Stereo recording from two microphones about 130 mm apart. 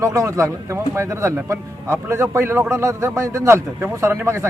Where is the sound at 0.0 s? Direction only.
25° right (ahead or behind).